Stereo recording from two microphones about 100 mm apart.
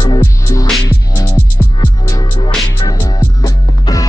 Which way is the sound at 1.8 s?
45° left (ahead or behind).